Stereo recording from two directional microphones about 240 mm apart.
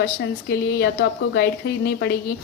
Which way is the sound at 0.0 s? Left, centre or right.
Left.